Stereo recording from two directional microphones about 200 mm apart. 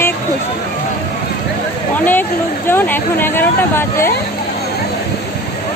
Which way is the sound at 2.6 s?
10° left (ahead or behind).